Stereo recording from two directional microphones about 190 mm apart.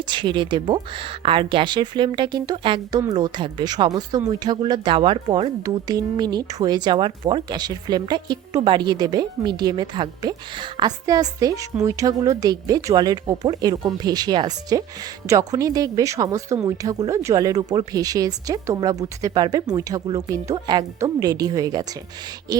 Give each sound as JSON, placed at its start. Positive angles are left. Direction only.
{"t": 0.0, "sound": "speech", "side_deg": -25}